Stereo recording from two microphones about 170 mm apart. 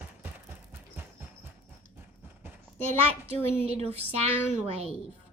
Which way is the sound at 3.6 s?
35° right (ahead or behind).